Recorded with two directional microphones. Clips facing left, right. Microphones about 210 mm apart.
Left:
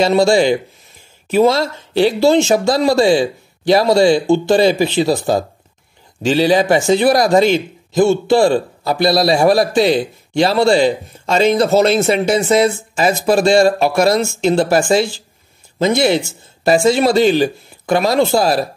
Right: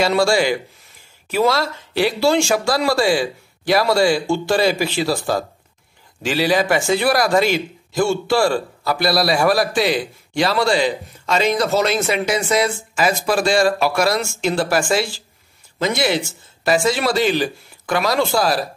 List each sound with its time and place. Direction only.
0.0 s a man's voice: 20° left (ahead or behind)